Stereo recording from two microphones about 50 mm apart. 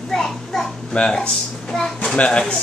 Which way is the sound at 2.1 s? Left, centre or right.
Centre.